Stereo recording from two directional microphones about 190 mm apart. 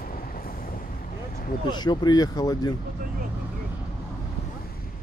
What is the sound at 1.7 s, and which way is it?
Speech, 20° left (ahead or behind).